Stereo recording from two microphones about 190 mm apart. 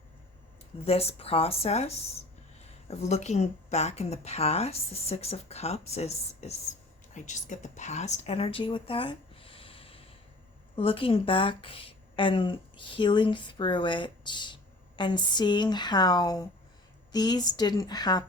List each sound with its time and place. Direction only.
0.9 s a woman's voice: 30° left (ahead or behind)